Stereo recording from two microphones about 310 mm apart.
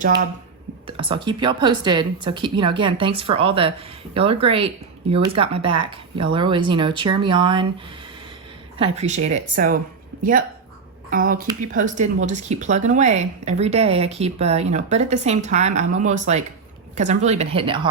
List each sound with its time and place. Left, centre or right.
0.9 s speech: centre
8.8 s speech: right
11.1 s speech: right